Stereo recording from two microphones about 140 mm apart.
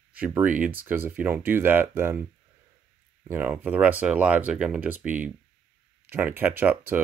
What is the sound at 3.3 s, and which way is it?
Speech, 15° right (ahead or behind).